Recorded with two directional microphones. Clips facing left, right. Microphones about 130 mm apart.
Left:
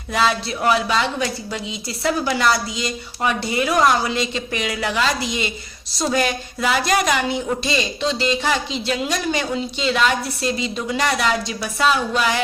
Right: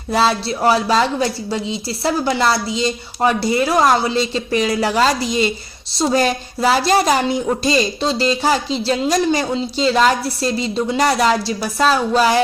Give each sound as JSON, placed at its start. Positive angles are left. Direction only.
{"t": 0.1, "sound": "a woman's voice", "side_deg": -35}